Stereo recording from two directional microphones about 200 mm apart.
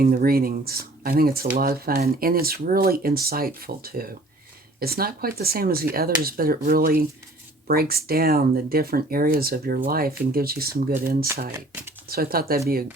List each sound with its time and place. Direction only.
0.0 s speech: 45° right (ahead or behind)
11.5 s speech: 10° right (ahead or behind)
12.0 s speech: 50° right (ahead or behind)